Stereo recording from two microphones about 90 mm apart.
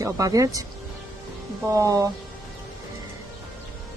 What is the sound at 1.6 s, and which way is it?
Speech, 35° right (ahead or behind).